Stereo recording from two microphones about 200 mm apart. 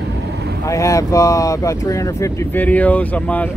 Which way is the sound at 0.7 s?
15° left (ahead or behind).